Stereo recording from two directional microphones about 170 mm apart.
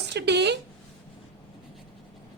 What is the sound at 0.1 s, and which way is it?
Speech, 85° right.